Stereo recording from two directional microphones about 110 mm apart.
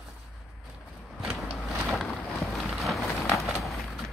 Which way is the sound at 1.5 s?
Centre (ahead or behind).